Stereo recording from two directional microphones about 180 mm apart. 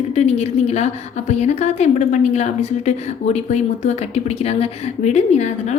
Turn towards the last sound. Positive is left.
turn(degrees=40)  # may be behind; listen again after turning